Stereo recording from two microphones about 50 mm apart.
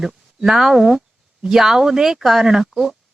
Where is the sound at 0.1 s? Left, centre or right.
Centre.